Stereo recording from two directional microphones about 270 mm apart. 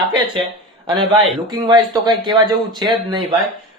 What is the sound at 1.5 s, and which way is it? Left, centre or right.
A man's voice, centre.